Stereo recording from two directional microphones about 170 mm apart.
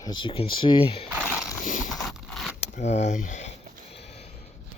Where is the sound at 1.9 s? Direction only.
Centre (ahead or behind).